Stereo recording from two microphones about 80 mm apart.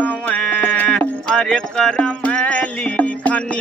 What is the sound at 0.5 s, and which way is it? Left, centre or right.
Music, left.